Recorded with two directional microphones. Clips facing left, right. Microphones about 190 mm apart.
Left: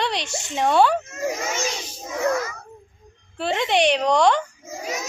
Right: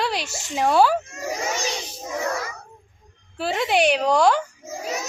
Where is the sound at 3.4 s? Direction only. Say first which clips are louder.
Even; 5° right (ahead or behind).